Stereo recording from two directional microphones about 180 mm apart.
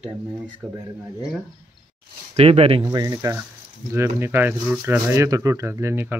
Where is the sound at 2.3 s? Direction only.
35° right (ahead or behind).